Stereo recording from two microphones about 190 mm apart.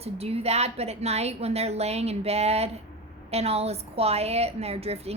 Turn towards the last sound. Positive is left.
turn(degrees=-30)  # may be behind; listen again after turning